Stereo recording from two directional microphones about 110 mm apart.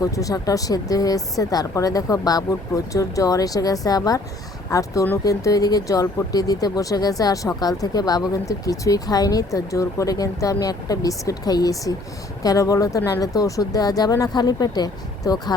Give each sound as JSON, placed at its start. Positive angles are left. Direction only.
{"t": 0.0, "sound": "speech", "side_deg": 30}